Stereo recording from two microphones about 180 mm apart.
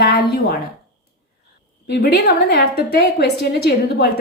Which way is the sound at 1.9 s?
65° left (ahead or behind).